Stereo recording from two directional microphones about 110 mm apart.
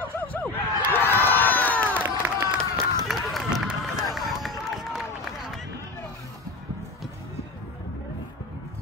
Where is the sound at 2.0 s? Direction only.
15° right (ahead or behind).